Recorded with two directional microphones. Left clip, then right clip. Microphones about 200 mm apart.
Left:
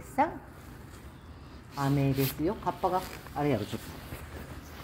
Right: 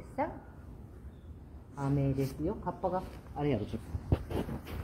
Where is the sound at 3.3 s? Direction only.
25° left (ahead or behind).